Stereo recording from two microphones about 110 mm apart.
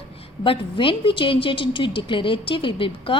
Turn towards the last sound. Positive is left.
turn(degrees=50)  # may be behind; listen again after turning